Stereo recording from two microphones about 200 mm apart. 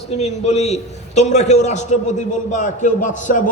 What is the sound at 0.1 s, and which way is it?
A man's voice, 30° left (ahead or behind).